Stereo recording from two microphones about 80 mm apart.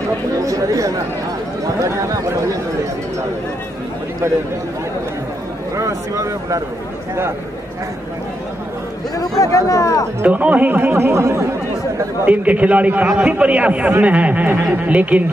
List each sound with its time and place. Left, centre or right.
0.4 s speech: right
5.8 s speech: right
9.7 s speech: left
10.2 s speech: centre; by 11.5 s right
12.3 s speech: centre